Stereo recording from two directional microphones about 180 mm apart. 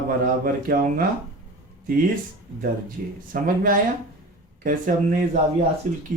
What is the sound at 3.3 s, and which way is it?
Speech, 50° right (ahead or behind).